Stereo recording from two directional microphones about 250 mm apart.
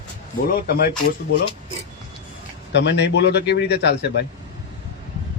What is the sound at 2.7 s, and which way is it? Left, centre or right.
A man's voice, left.